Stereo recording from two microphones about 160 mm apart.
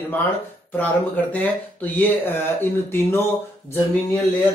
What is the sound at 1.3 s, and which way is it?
Speech, 10° left (ahead or behind).